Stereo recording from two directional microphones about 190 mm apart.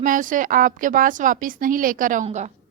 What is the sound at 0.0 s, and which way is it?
A woman's voice, 45° right (ahead or behind).